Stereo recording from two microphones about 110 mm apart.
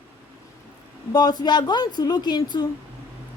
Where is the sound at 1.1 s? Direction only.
40° left (ahead or behind).